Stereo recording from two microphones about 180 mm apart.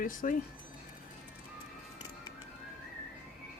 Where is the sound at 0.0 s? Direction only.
50° left (ahead or behind).